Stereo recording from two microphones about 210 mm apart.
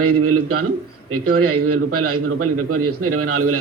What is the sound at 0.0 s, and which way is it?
A man's voice, 90° right.